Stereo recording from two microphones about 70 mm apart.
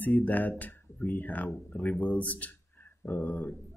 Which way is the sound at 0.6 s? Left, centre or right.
Left.